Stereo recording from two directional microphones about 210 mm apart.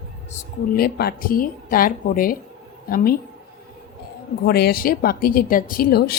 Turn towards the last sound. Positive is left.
turn(degrees=45)  # may be behind; listen again after turning